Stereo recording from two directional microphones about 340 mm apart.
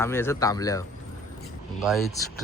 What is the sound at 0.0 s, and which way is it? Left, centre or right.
Speech, centre.